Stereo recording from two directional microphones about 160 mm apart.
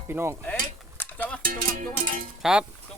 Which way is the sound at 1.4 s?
60° right (ahead or behind).